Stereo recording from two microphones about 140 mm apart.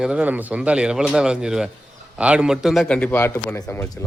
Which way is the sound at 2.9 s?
15° left (ahead or behind).